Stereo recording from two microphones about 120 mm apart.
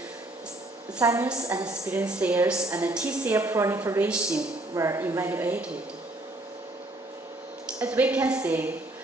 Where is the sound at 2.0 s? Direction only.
10° right (ahead or behind).